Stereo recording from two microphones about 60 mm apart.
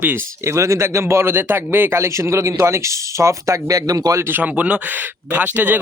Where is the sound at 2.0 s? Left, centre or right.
Right.